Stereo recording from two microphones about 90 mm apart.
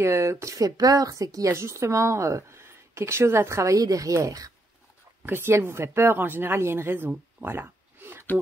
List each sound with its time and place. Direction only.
0.0 s a woman's voice: 30° right (ahead or behind)
1.5 s a woman's voice: 30° right (ahead or behind)
5.2 s speech: 25° right (ahead or behind)